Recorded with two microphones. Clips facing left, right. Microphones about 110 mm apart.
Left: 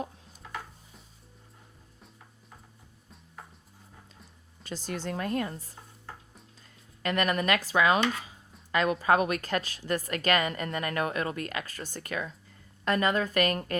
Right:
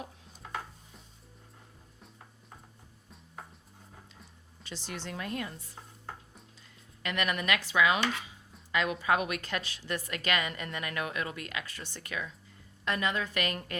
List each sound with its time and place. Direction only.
4.6 s a woman's voice: 45° left (ahead or behind)
7.0 s a woman's voice: 40° left (ahead or behind)